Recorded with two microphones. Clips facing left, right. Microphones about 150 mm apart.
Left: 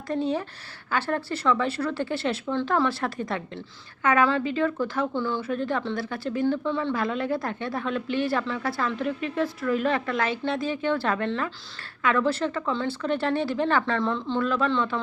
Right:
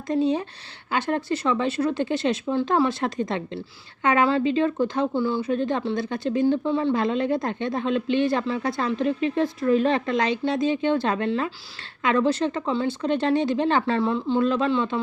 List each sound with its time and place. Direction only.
0.1 s a woman's voice: 20° right (ahead or behind)